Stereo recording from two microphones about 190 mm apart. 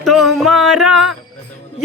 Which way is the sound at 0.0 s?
Centre (ahead or behind).